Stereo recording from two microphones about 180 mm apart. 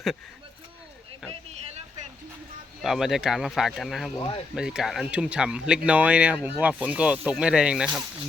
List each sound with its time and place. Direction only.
1.3 s speech: 35° right (ahead or behind)
2.8 s speech: centre (ahead or behind)